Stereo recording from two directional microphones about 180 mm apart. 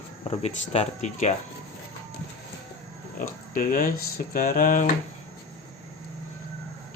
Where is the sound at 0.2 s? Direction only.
35° left (ahead or behind).